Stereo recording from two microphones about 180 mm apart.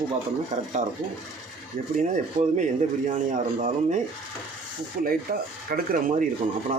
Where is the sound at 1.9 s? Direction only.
40° right (ahead or behind).